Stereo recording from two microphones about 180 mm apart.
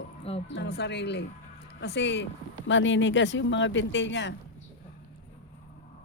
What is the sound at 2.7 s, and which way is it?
Speech, 90° left.